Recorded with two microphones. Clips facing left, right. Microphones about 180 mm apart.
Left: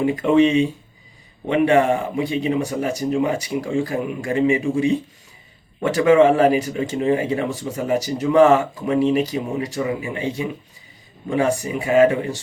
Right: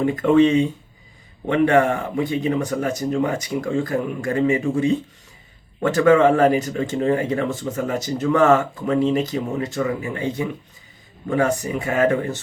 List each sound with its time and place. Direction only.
0.0 s speech: 15° left (ahead or behind)
5.8 s speech: 15° left (ahead or behind)